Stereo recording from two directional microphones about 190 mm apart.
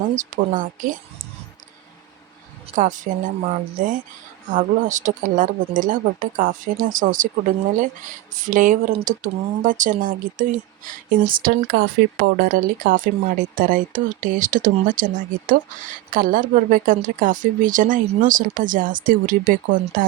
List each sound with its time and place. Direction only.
0.2 s speech: 45° right (ahead or behind)
2.7 s speech: 40° right (ahead or behind)
8.4 s speech: 45° right (ahead or behind)